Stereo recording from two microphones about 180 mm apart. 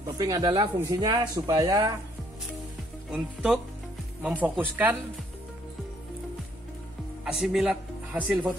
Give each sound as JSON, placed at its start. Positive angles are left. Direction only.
{"t": 0.0, "sound": "speech", "side_deg": -20}
{"t": 3.1, "sound": "speech", "side_deg": -5}
{"t": 7.2, "sound": "speech", "side_deg": -5}